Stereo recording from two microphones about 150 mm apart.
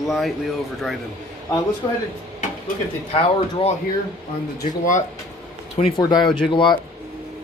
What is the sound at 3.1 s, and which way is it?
Speech, 40° left (ahead or behind).